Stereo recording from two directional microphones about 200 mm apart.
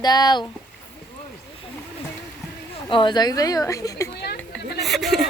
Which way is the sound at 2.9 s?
25° left (ahead or behind).